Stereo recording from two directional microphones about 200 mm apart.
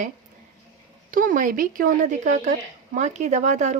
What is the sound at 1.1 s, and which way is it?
Speech, 40° right (ahead or behind).